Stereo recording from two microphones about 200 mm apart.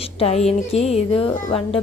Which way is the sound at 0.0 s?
30° left (ahead or behind).